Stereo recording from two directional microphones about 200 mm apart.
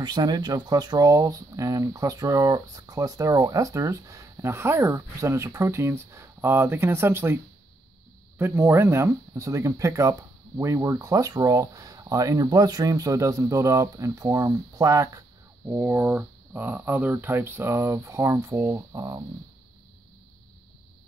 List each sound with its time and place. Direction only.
0.0 s speech: 20° right (ahead or behind)
8.4 s speech: 10° right (ahead or behind)